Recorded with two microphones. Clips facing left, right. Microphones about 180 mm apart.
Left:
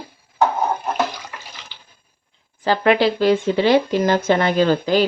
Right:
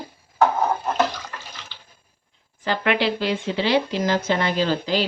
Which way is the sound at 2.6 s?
40° left (ahead or behind).